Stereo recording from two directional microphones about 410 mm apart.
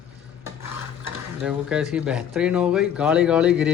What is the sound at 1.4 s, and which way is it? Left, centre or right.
Speech, centre.